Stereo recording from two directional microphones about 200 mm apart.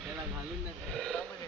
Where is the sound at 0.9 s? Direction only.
Centre (ahead or behind).